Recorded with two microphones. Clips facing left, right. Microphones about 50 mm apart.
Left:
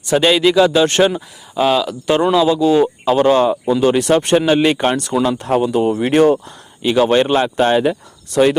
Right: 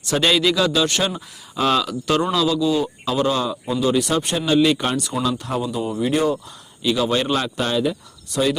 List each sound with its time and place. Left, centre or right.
0.1 s a man's voice: left
1.5 s speech: centre
2.3 s a man's voice: left
2.6 s speech: left
4.4 s speech: left
6.8 s speech: left